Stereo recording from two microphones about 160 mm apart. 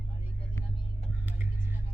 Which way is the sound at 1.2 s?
10° right (ahead or behind).